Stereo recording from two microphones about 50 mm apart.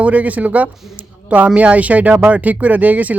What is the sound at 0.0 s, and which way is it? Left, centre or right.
Speech, right.